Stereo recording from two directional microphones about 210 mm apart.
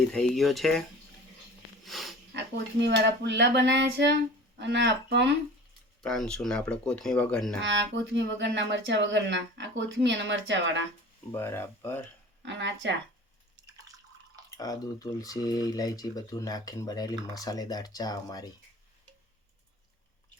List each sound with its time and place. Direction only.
0.1 s speech: centre (ahead or behind)
1.8 s sniff: centre (ahead or behind)
2.8 s speech: 55° right (ahead or behind)
6.0 s speech: 5° left (ahead or behind)
7.6 s speech: 60° right (ahead or behind)
11.3 s speech: 10° left (ahead or behind)
12.5 s speech: 60° right (ahead or behind)
14.5 s speech: 15° left (ahead or behind)